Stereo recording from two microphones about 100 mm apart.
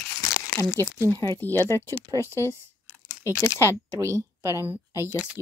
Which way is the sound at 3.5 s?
25° left (ahead or behind).